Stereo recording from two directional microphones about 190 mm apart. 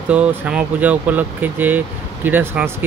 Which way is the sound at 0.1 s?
5° right (ahead or behind).